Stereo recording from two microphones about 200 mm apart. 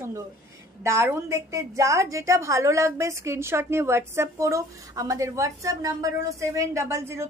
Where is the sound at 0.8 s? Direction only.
10° right (ahead or behind).